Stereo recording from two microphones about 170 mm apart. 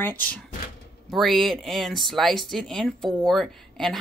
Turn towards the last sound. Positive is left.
turn(degrees=0)  # may be behind; listen again after turning